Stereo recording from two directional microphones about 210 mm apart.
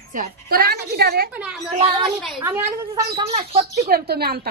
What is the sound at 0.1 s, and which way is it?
A woman's voice, 45° right (ahead or behind).